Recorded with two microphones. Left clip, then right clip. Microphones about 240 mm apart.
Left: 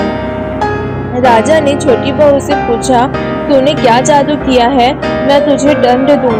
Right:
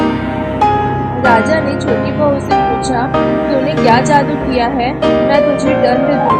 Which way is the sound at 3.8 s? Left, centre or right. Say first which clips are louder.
Left 2 dB; left.